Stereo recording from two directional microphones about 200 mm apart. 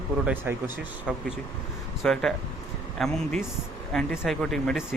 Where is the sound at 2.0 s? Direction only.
5° left (ahead or behind).